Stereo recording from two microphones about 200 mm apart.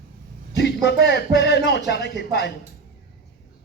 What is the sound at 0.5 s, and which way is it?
Speech, 55° left (ahead or behind).